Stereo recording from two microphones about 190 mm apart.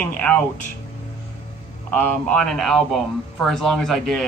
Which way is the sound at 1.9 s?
5° left (ahead or behind).